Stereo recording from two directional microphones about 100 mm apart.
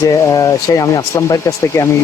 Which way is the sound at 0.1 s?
40° left (ahead or behind).